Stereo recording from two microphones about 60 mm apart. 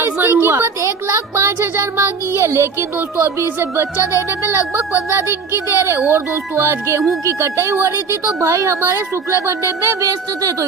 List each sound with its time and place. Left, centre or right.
0.0 s speech: right
8.4 s speech: right